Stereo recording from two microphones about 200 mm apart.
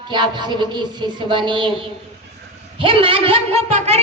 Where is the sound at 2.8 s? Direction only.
25° right (ahead or behind).